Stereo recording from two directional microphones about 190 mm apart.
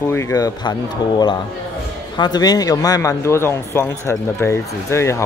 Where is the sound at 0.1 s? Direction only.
15° left (ahead or behind).